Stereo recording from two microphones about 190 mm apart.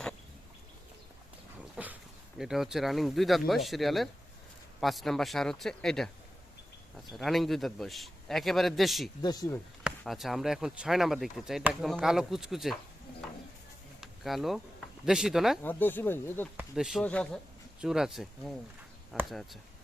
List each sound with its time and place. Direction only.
1.7 s dog: 10° right (ahead or behind)
2.4 s speech: centre (ahead or behind)
7.1 s speech: centre (ahead or behind)
9.2 s speech: 20° left (ahead or behind)
10.0 s speech: centre (ahead or behind)
14.0 s a sound: centre (ahead or behind)
15.0 s speech: 5° right (ahead or behind)
15.6 s speech: 10° left (ahead or behind)
16.6 s speech: 5° right (ahead or behind)